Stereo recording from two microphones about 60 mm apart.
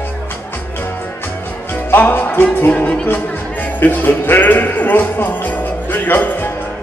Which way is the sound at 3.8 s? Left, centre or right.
Left.